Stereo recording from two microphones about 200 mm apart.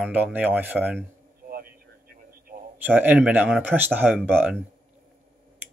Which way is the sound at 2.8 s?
10° right (ahead or behind).